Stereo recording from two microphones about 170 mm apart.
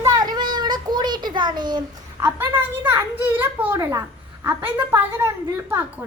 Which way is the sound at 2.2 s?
10° right (ahead or behind).